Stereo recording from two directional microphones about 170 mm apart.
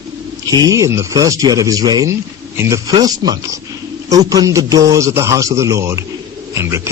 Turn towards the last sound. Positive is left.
turn(degrees=-15)  # may be behind; listen again after turning